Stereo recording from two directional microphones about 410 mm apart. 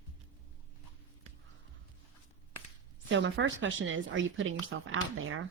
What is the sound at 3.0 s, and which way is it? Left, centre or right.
Speech, right.